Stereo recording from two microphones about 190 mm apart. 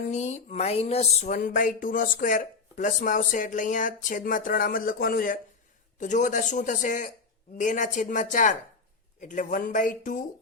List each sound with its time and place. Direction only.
0.1 s speech: 35° left (ahead or behind)
1.4 s speech: 45° left (ahead or behind)